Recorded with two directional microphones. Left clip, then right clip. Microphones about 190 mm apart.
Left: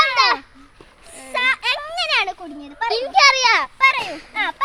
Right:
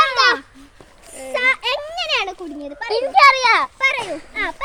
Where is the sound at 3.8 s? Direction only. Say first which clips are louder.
Left 3 dB; 30° left (ahead or behind).